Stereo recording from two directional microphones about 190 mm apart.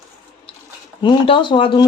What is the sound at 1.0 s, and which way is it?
Speech, 25° left (ahead or behind).